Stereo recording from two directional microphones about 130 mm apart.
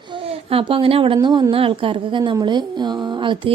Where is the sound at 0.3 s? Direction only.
45° right (ahead or behind).